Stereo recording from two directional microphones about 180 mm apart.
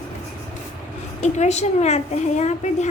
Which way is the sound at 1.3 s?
40° left (ahead or behind).